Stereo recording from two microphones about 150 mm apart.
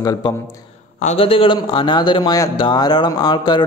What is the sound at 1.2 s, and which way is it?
A man's voice, 35° left (ahead or behind).